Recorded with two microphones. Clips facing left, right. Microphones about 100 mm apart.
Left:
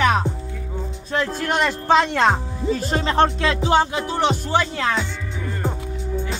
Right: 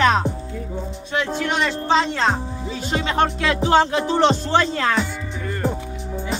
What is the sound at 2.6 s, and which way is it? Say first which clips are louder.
Music: left 4 dB; 45° left (ahead or behind).